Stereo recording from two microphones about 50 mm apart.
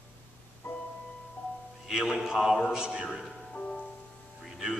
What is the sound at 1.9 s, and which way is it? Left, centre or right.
Mantra, centre.